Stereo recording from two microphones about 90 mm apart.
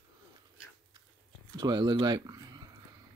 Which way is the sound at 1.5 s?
50° right (ahead or behind).